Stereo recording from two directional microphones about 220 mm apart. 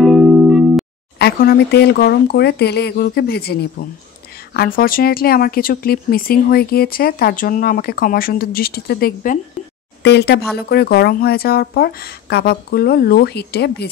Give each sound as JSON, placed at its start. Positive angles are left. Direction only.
{"t": 0.0, "sound": "music", "side_deg": 0}
{"t": 1.1, "sound": "speech", "side_deg": 45}
{"t": 4.6, "sound": "speech", "side_deg": 40}